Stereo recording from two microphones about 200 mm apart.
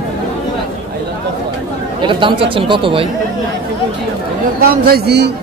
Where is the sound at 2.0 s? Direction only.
25° right (ahead or behind).